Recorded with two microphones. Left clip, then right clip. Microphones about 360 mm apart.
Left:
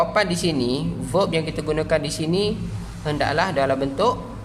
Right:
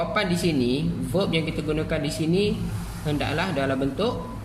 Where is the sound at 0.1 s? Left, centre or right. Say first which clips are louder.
Left 3 dB; centre.